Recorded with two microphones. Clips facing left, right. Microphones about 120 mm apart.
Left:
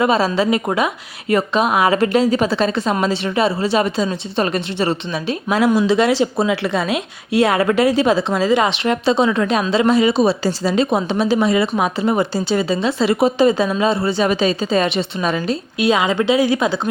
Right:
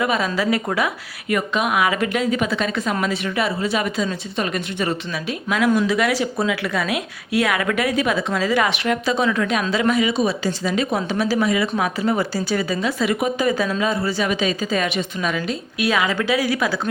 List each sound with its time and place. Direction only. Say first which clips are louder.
0.0 s a woman's voice: left 5 dB; 30° left (ahead or behind)